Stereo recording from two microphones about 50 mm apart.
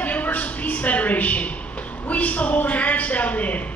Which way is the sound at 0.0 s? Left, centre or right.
Left.